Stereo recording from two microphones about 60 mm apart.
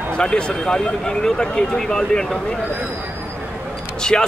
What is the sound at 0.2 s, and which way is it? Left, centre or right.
Speech, centre.